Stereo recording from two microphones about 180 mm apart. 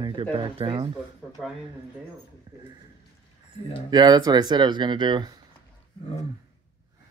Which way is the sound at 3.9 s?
25° right (ahead or behind).